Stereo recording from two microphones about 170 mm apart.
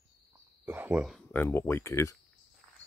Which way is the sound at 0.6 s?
10° right (ahead or behind).